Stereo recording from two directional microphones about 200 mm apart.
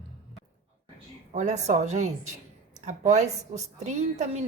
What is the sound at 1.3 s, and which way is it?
A woman's voice, 35° right (ahead or behind).